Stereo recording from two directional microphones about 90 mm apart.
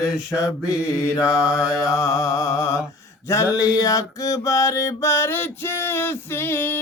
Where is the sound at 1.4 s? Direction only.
10° right (ahead or behind).